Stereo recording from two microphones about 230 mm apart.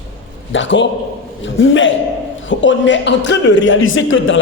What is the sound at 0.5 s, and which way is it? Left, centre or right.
A man's voice, left.